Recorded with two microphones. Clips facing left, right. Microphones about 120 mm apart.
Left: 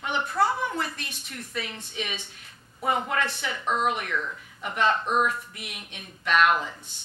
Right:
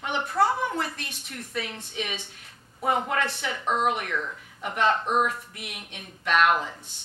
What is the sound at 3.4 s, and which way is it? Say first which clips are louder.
A woman's voice: right 1 dB; 45° right (ahead or behind).